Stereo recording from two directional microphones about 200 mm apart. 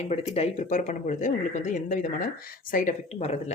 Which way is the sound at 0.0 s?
35° left (ahead or behind).